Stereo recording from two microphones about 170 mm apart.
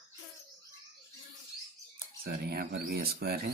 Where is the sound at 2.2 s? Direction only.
60° right (ahead or behind).